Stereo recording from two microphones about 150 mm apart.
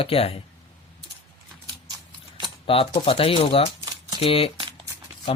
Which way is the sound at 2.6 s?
40° left (ahead or behind).